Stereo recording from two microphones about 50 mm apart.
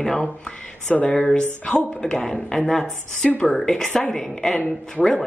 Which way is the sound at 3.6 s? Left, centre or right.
Centre.